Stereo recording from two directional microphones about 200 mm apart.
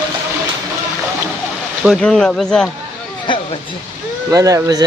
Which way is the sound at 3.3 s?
25° left (ahead or behind).